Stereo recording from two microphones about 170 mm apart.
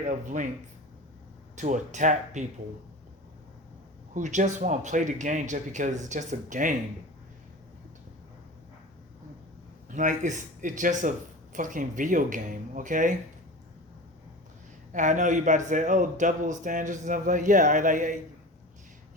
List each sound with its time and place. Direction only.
0.1 s a man's voice: 50° right (ahead or behind)
1.5 s a man's voice: 45° right (ahead or behind)
4.1 s a man's voice: 45° right (ahead or behind)
9.9 s a man's voice: 45° right (ahead or behind)
14.9 s a man's voice: 50° right (ahead or behind)